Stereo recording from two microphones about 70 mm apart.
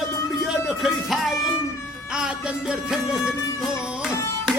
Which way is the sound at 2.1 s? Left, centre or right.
Centre.